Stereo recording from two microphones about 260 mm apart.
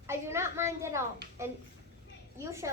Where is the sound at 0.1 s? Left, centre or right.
Centre.